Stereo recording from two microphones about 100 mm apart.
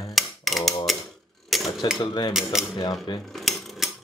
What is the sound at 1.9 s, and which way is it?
Cutlery, 55° left (ahead or behind).